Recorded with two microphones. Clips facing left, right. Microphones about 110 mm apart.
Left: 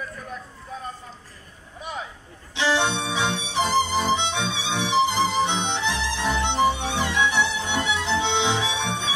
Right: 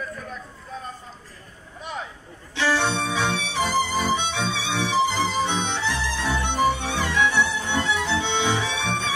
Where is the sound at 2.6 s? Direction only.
20° left (ahead or behind).